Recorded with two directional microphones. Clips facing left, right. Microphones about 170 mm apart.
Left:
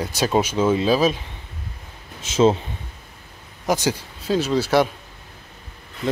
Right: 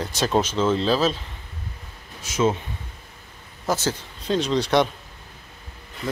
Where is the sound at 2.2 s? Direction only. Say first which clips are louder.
Left 5 dB; 30° left (ahead or behind).